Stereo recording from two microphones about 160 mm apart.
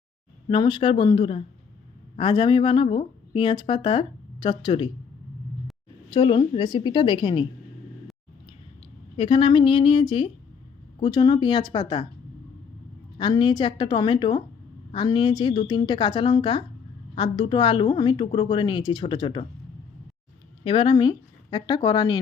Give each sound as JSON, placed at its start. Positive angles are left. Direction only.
{"t": 0.4, "sound": "speech", "side_deg": 30}
{"t": 6.1, "sound": "a woman's voice", "side_deg": 30}
{"t": 9.1, "sound": "a woman's voice", "side_deg": 35}
{"t": 13.1, "sound": "a woman's voice", "side_deg": 30}
{"t": 20.7, "sound": "speech", "side_deg": 30}